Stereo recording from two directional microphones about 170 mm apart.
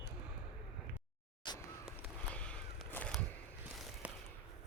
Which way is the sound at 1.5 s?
25° left (ahead or behind).